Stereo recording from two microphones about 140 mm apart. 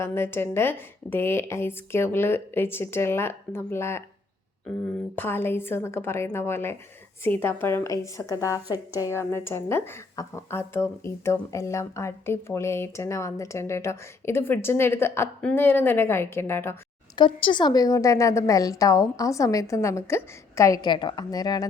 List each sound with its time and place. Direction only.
0.0 s a woman's voice: 15° left (ahead or behind)
5.1 s a woman's voice: 15° left (ahead or behind)
17.2 s a woman's voice: 35° left (ahead or behind)